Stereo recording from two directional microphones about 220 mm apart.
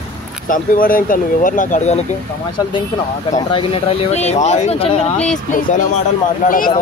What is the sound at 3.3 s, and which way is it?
Speech, 25° left (ahead or behind).